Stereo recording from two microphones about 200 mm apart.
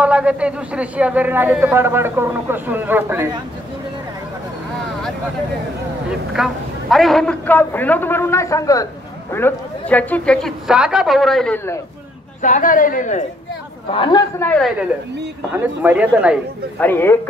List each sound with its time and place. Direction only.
0.0 s speech: 5° right (ahead or behind)
6.0 s a man's voice: centre (ahead or behind)
12.4 s a man's voice: 40° left (ahead or behind)
13.9 s a man's voice: 25° left (ahead or behind)
14.4 s a man's voice: 5° left (ahead or behind)
15.6 s speech: 10° right (ahead or behind)
16.7 s a man's voice: 10° left (ahead or behind)